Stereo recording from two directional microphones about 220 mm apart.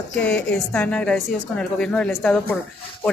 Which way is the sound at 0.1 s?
5° left (ahead or behind).